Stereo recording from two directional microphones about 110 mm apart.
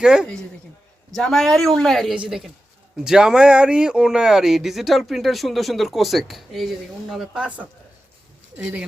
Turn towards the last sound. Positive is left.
turn(degrees=-10)  # may be behind; listen again after turning